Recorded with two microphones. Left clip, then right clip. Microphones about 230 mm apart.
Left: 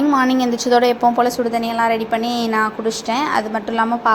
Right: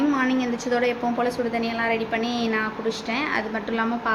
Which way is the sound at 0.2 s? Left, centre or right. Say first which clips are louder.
Left 7 dB; left.